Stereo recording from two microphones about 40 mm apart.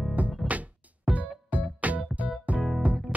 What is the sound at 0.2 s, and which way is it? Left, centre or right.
Music, right.